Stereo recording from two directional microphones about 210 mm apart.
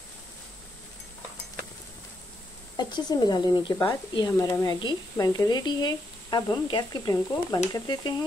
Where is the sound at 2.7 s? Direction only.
20° left (ahead or behind).